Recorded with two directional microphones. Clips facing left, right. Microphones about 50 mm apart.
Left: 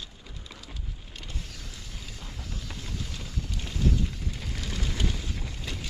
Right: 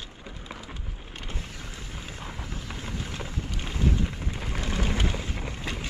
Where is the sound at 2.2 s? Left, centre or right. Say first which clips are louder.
Right 3 dB; right.